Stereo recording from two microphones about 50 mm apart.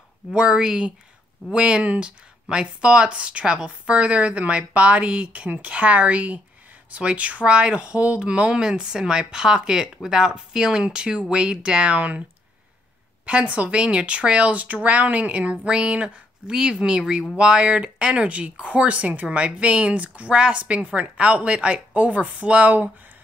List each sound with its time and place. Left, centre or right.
0.3 s speech: centre
13.2 s speech: right
14.5 s speech: right